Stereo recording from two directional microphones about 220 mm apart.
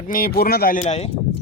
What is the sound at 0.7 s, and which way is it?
Speech, 30° left (ahead or behind).